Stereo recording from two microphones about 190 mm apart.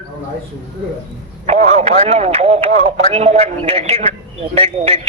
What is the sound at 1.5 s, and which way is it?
Speech, 35° right (ahead or behind).